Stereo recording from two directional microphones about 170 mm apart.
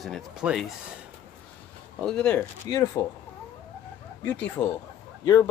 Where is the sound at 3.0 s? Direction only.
20° left (ahead or behind).